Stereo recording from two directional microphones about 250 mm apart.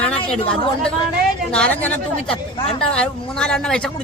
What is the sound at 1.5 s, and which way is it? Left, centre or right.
Speech, centre.